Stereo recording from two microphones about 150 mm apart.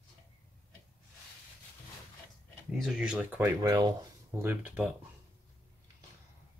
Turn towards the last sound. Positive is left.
turn(degrees=-10)  # may be behind; listen again after turning